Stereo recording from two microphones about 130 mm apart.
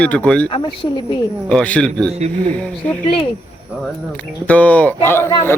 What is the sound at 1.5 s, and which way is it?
Speech, 10° left (ahead or behind).